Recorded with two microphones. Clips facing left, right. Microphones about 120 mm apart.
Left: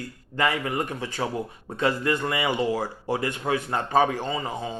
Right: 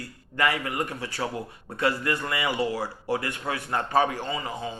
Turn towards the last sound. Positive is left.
turn(degrees=30)  # may be behind; listen again after turning